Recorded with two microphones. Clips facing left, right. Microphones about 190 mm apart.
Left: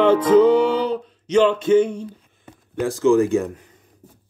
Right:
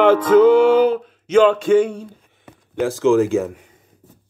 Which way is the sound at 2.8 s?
90° right.